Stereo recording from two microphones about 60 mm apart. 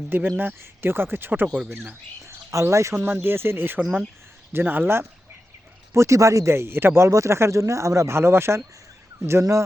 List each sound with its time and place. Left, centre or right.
0.1 s speech: right
2.2 s speech: right
3.0 s speech: right
5.9 s speech: right
7.1 s speech: right
9.4 s speech: right